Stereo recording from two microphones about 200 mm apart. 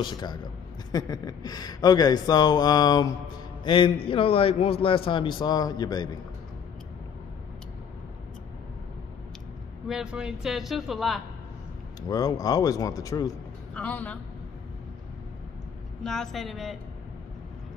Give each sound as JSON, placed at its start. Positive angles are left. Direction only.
{"t": 0.0, "sound": "speech", "side_deg": 20}
{"t": 9.8, "sound": "a man's voice", "side_deg": -5}
{"t": 12.1, "sound": "speech", "side_deg": 20}
{"t": 13.7, "sound": "speech", "side_deg": 5}
{"t": 16.0, "sound": "a man's voice", "side_deg": 5}